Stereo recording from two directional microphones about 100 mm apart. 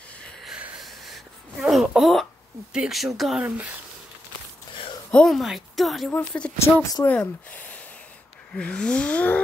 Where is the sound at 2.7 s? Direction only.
5° right (ahead or behind).